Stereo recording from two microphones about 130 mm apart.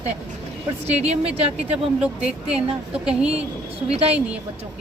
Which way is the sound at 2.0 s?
10° right (ahead or behind).